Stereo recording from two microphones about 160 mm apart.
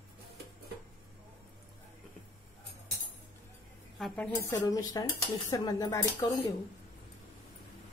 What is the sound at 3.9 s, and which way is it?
Speech, 5° left (ahead or behind).